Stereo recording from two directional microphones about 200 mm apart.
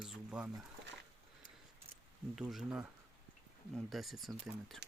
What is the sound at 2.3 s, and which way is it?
Speech, centre (ahead or behind).